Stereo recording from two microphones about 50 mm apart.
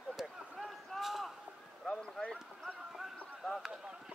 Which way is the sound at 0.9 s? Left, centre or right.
Centre.